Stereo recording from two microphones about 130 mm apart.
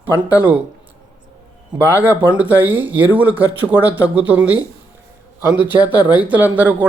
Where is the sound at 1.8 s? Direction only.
15° right (ahead or behind).